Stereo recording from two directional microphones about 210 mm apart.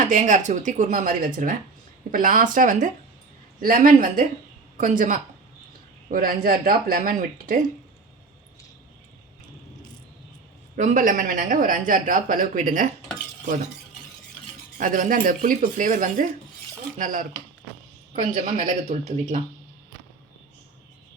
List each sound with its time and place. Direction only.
0.0 s speech: 40° right (ahead or behind)
10.8 s speech: 35° right (ahead or behind)
14.8 s speech: 40° right (ahead or behind)